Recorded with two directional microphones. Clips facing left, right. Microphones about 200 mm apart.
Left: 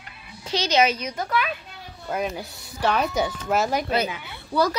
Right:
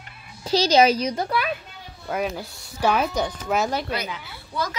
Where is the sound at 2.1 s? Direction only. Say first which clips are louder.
Right 1 dB; centre (ahead or behind).